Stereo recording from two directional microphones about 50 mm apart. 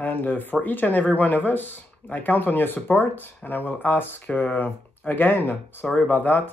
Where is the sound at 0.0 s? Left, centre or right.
Left.